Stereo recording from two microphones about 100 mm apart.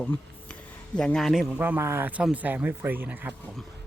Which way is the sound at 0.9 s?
5° left (ahead or behind).